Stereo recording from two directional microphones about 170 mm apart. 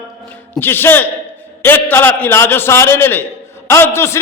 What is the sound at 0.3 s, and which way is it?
A man's voice, 10° left (ahead or behind).